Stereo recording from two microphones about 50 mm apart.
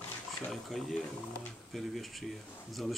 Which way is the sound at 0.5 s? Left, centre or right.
Centre.